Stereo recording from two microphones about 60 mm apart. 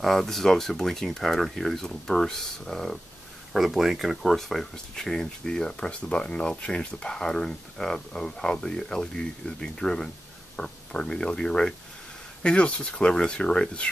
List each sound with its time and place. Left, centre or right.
0.0 s speech: centre